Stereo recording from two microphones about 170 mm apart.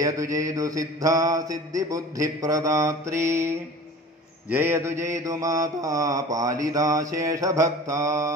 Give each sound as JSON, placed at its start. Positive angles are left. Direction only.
{"t": 0.0, "sound": "mantra", "side_deg": -20}